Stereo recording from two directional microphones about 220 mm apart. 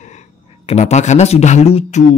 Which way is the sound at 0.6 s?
30° left (ahead or behind).